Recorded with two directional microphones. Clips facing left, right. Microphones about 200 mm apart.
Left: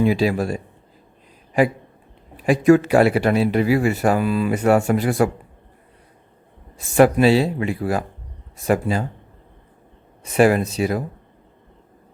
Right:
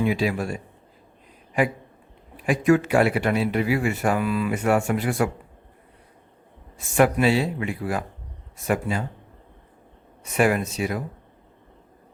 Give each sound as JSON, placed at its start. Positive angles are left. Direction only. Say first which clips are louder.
{"t": 0.0, "sound": "a man's voice", "louder": "left 5 dB", "side_deg": 35}
{"t": 2.5, "sound": "a man's voice", "louder": "left 5 dB", "side_deg": 35}
{"t": 6.7, "sound": "a man's voice", "louder": "left 5 dB", "side_deg": 35}
{"t": 10.3, "sound": "a man's voice", "louder": "left 5 dB", "side_deg": 35}